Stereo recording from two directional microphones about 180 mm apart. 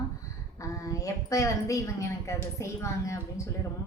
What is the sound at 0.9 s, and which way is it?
A woman's voice, 15° left (ahead or behind).